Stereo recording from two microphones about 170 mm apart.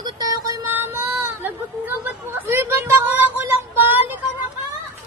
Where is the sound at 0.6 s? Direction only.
15° right (ahead or behind).